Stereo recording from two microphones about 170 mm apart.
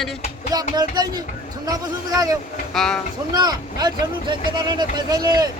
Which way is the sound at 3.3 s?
25° right (ahead or behind).